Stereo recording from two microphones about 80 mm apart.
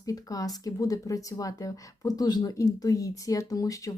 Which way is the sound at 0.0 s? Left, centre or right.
Left.